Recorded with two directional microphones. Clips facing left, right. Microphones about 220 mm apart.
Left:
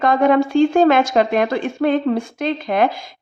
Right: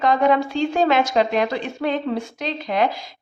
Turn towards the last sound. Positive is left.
turn(degrees=50)  # may be behind; listen again after turning